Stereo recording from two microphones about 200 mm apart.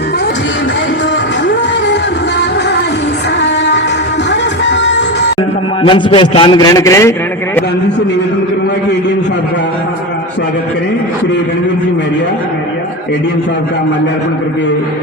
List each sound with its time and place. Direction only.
4.3 s music: 60° left (ahead or behind)
5.8 s a man's voice: 25° left (ahead or behind)